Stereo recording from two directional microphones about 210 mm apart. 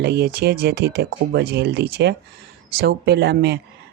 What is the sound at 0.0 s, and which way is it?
Speech, 50° right (ahead or behind).